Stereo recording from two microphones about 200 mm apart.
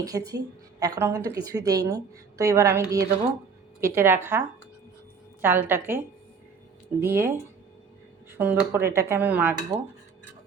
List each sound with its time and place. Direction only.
0.0 s a woman's voice: 20° right (ahead or behind)
7.0 s a woman's voice: 15° right (ahead or behind)